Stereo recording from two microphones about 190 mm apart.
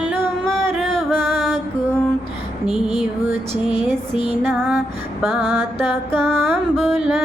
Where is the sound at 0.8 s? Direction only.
5° left (ahead or behind).